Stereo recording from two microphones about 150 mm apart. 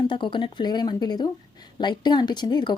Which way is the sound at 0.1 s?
35° left (ahead or behind).